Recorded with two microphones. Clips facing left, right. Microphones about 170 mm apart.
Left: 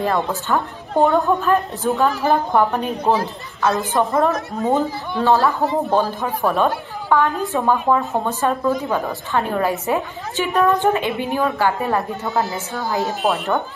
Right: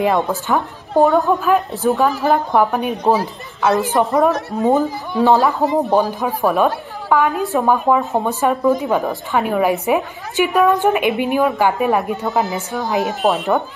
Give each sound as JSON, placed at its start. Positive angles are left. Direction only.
{"t": 0.0, "sound": "a woman's voice", "side_deg": -15}
{"t": 1.8, "sound": "a woman's voice", "side_deg": -15}
{"t": 2.0, "sound": "a woman's voice", "side_deg": 0}
{"t": 6.2, "sound": "a woman's voice", "side_deg": -5}
{"t": 10.5, "sound": "a woman's voice", "side_deg": -5}
{"t": 10.9, "sound": "a woman's voice", "side_deg": -15}